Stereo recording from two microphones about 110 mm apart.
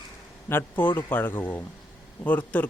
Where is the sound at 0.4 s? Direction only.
20° left (ahead or behind).